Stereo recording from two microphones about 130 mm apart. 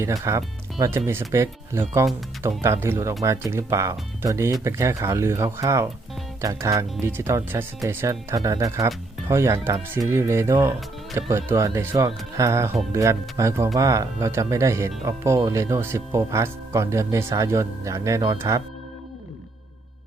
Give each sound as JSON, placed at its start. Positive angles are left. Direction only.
{"t": 0.0, "sound": "speech", "side_deg": -25}